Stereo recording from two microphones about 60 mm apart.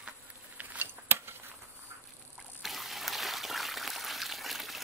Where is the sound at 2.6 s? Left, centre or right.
Centre.